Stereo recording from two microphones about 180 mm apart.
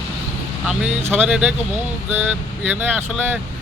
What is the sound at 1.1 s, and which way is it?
Speech, 5° right (ahead or behind).